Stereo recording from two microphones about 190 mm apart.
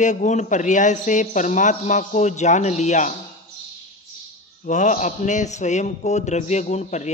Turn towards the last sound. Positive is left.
turn(degrees=35)  # may be behind; listen again after turning